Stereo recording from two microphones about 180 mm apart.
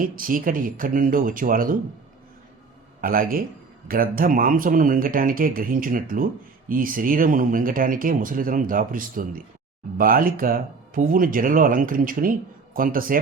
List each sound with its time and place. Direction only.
0.0 s speech: 50° right (ahead or behind)
3.0 s speech: 50° right (ahead or behind)